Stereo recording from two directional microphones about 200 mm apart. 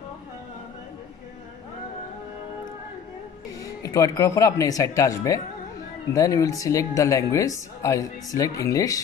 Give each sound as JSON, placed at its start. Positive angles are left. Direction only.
{"t": 3.6, "sound": "speech", "side_deg": 15}